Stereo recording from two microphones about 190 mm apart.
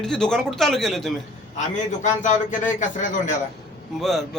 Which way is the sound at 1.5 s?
40° left (ahead or behind).